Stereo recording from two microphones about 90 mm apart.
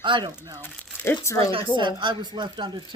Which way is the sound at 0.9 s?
25° left (ahead or behind).